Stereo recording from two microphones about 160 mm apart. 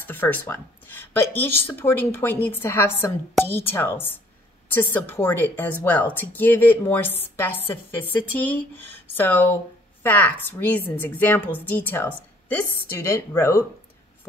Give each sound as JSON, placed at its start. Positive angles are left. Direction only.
{"t": 0.0, "sound": "speech", "side_deg": 10}